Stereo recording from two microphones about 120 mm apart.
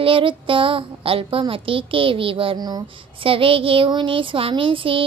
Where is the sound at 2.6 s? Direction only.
35° right (ahead or behind).